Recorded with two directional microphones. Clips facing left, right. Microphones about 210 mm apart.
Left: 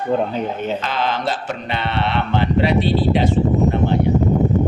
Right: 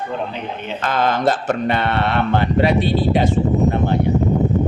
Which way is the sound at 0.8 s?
50° right (ahead or behind).